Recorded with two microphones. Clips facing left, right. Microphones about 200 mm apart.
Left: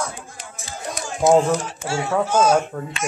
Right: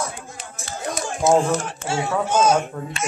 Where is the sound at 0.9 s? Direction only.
10° left (ahead or behind).